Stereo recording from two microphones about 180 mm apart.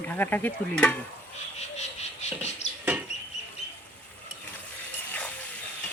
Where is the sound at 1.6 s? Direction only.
40° left (ahead or behind).